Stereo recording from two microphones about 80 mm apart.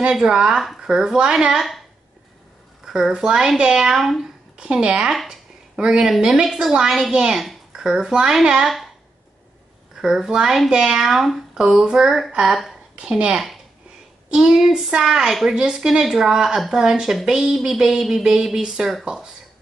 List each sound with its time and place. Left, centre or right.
0.0 s a woman's voice: centre
2.8 s a woman's voice: centre
9.9 s a woman's voice: centre